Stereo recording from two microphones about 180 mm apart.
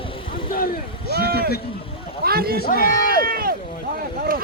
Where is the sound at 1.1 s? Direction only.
60° right (ahead or behind).